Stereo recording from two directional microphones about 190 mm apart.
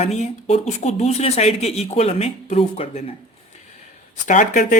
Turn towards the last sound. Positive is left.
turn(degrees=40)  # may be behind; listen again after turning